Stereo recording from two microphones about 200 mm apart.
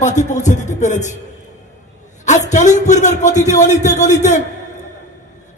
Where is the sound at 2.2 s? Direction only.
35° left (ahead or behind).